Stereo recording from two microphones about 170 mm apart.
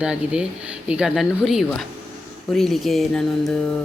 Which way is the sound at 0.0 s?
5° right (ahead or behind).